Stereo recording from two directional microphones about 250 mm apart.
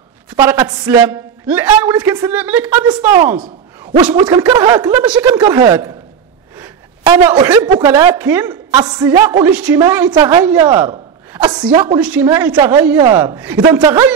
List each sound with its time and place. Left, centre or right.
0.4 s a man's voice: centre
5.0 s speech: centre
5.3 s a man's voice: centre
6.6 s a sound: centre
7.7 s a man's voice: centre